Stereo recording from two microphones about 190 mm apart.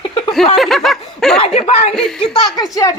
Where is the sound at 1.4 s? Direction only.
30° left (ahead or behind).